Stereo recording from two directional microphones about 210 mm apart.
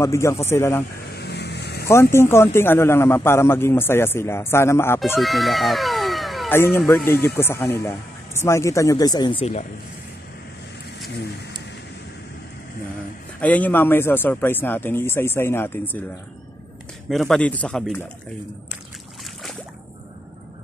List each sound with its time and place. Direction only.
0.0 s a man's voice: 15° left (ahead or behind)
1.1 s vehicle: 55° left (ahead or behind)
1.9 s a man's voice: 10° left (ahead or behind)
5.2 s a sound: centre (ahead or behind)
6.5 s a man's voice: 10° left (ahead or behind); by 9.7 s 30° left (ahead or behind)
11.1 s speech: 55° left (ahead or behind)
13.4 s a man's voice: 5° left (ahead or behind)
17.1 s speech: centre (ahead or behind)